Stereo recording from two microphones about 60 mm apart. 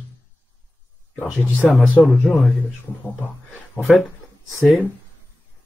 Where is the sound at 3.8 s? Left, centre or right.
Left.